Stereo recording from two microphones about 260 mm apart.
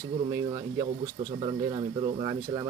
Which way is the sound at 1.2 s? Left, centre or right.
Right.